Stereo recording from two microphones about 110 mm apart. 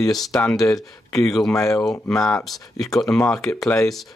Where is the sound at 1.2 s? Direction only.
5° left (ahead or behind).